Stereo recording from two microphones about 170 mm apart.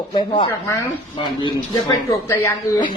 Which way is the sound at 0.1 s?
30° left (ahead or behind).